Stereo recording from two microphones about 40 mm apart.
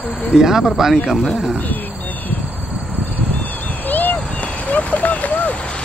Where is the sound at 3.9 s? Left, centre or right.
Left.